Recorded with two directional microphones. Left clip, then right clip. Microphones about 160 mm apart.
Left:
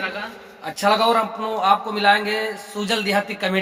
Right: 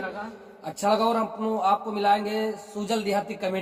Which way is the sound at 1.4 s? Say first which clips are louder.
Left 5 dB; 10° left (ahead or behind).